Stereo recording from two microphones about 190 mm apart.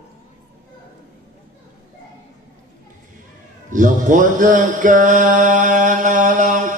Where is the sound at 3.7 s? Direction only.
45° right (ahead or behind).